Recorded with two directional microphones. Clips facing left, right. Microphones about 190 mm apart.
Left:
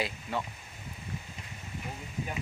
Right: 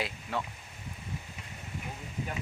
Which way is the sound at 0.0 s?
Centre (ahead or behind).